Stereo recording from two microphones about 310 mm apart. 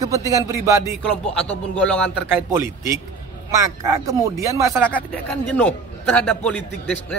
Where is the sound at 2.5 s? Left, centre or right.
Centre.